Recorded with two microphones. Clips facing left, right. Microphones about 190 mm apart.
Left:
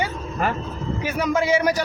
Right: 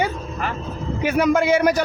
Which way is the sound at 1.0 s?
60° right (ahead or behind).